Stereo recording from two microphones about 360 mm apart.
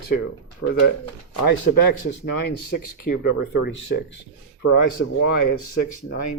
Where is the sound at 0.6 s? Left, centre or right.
Left.